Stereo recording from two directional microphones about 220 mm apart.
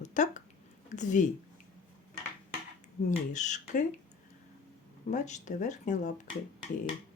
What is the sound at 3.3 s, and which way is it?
Speech, 35° left (ahead or behind).